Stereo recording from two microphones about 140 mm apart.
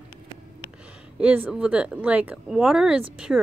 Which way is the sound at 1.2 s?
10° right (ahead or behind).